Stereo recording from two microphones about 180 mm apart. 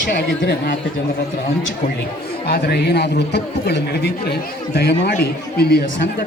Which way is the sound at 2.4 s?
60° left (ahead or behind).